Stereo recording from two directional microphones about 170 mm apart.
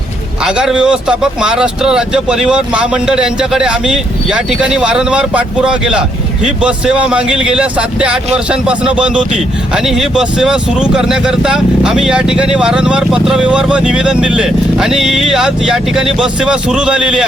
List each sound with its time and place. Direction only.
0.4 s speech: 5° right (ahead or behind)